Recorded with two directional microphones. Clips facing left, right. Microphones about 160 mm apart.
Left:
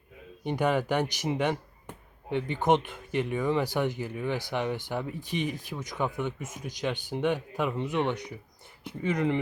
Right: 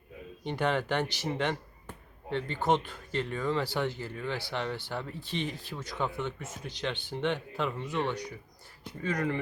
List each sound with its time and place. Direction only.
0.4 s speech: 10° left (ahead or behind)